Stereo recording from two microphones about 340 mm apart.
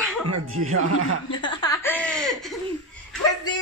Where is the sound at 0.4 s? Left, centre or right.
Right.